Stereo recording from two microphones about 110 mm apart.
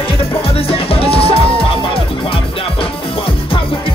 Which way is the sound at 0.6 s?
60° left (ahead or behind).